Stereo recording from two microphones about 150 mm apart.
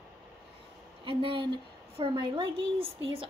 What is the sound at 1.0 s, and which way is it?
A woman's voice, 35° right (ahead or behind).